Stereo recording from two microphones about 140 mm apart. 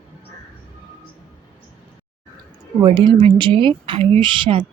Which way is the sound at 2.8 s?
40° right (ahead or behind).